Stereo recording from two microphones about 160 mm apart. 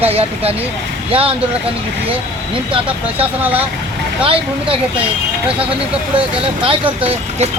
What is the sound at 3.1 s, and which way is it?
Speech, 10° right (ahead or behind).